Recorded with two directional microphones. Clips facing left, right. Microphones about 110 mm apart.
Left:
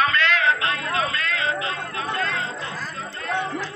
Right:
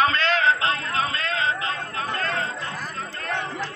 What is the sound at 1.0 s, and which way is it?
Chatter, 30° right (ahead or behind).